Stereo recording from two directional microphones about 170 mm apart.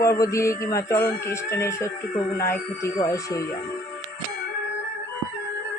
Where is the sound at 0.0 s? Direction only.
20° left (ahead or behind).